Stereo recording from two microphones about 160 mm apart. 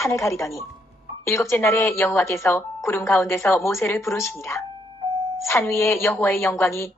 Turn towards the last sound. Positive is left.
turn(degrees=15)  # may be behind; listen again after turning